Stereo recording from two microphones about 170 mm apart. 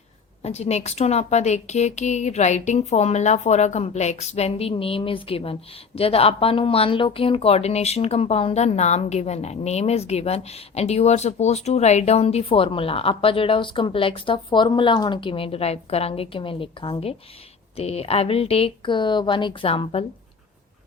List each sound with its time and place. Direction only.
0.4 s a woman's voice: 40° left (ahead or behind)